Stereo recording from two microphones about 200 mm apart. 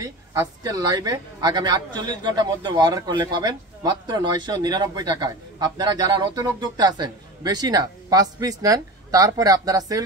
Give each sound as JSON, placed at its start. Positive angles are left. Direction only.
{"t": 0.0, "sound": "speech", "side_deg": -20}